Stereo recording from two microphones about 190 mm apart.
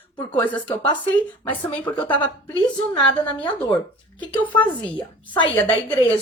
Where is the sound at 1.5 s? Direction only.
10° left (ahead or behind).